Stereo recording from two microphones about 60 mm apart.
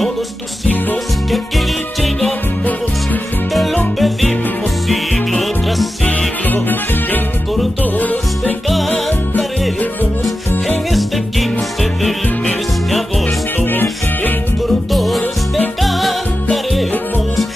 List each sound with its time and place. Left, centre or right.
4.0 s music: centre
6.0 s music: left
8.6 s music: centre
10.9 s music: centre
13.7 s music: left
14.7 s music: centre